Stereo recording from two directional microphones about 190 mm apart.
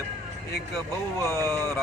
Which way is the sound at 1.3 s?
15° right (ahead or behind).